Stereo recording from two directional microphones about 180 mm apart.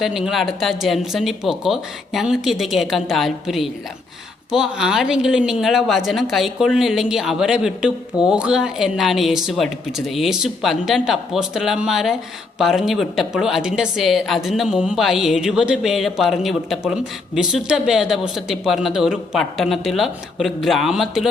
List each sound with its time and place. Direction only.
0.0 s a woman's voice: centre (ahead or behind)